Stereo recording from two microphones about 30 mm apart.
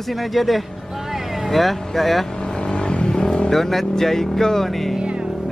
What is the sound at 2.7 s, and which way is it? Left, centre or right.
Vehicle, left.